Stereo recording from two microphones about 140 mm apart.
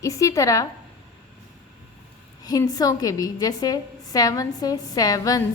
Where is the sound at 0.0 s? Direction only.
25° left (ahead or behind).